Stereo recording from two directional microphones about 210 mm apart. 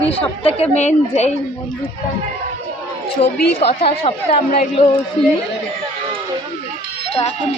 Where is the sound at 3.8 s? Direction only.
30° left (ahead or behind).